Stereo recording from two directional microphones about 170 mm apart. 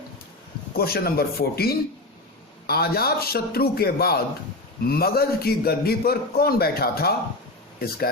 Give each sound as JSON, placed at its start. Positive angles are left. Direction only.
{"t": 0.8, "sound": "a man's voice", "side_deg": 65}